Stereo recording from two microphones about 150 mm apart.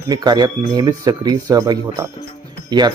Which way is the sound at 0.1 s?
30° right (ahead or behind).